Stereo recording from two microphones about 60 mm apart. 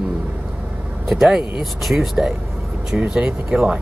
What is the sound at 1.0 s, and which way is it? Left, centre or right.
Speech, centre.